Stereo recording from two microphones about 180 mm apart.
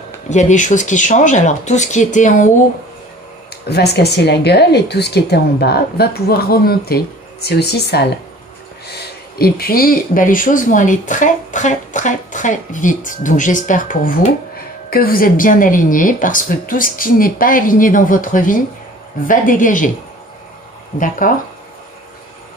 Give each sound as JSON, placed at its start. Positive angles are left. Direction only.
{"t": 0.3, "sound": "speech", "side_deg": 40}
{"t": 3.6, "sound": "a woman's voice", "side_deg": 65}
{"t": 9.4, "sound": "speech", "side_deg": 55}
{"t": 21.2, "sound": "speech", "side_deg": 50}